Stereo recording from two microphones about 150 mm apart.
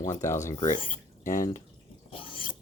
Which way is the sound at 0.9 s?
60° left (ahead or behind).